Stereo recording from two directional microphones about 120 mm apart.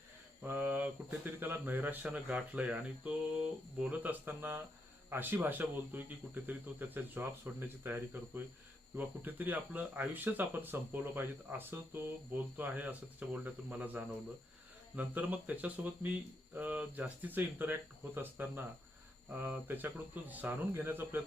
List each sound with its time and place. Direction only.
0.4 s speech: 15° right (ahead or behind)